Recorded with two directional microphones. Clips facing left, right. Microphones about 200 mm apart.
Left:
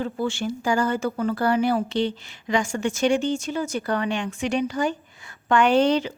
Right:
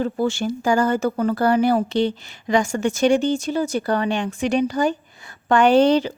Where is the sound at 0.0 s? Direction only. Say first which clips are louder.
Right 4 dB; 40° right (ahead or behind).